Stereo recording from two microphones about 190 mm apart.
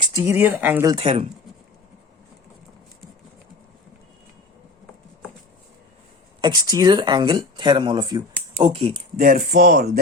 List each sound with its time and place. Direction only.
0.1 s speech: 15° right (ahead or behind)
0.9 s speech: 30° right (ahead or behind)
6.4 s speech: 20° right (ahead or behind)
9.1 s speech: 50° right (ahead or behind)